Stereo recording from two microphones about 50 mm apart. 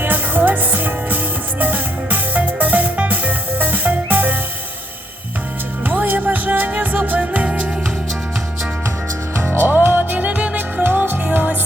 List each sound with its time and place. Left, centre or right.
0.0 s music: right
5.8 s music: right
9.4 s music: right
10.2 s music: right
10.8 s music: right
11.2 s music: right